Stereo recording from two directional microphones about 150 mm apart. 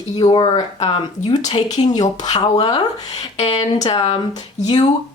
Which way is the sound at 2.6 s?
45° left (ahead or behind).